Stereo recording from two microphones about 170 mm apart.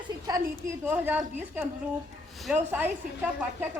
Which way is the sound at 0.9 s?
10° right (ahead or behind).